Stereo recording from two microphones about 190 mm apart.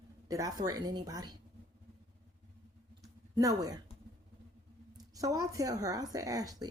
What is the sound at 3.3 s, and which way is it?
Speech, 20° right (ahead or behind).